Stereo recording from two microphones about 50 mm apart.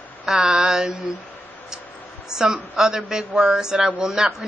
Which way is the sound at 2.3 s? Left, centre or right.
Centre.